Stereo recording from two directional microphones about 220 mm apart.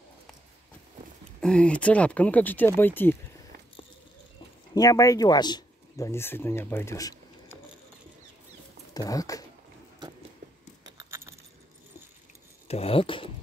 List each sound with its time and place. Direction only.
1.4 s speech: 5° left (ahead or behind)
4.7 s speech: 15° left (ahead or behind)
8.9 s speech: 15° left (ahead or behind)
11.0 s keys jangling: 10° right (ahead or behind)
12.6 s speech: 25° left (ahead or behind)